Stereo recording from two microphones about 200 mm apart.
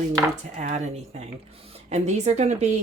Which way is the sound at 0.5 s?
35° right (ahead or behind).